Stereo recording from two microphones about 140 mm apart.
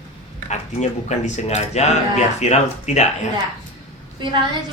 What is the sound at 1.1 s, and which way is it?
Speech, 55° left (ahead or behind).